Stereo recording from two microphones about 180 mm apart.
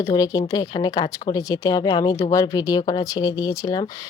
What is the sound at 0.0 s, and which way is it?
Speech, 20° left (ahead or behind).